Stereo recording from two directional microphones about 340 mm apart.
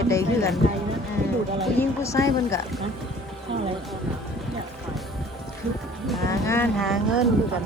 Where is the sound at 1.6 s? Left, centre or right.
Centre.